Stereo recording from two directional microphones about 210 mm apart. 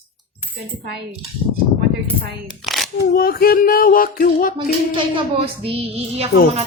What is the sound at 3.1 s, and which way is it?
Speech, 45° left (ahead or behind).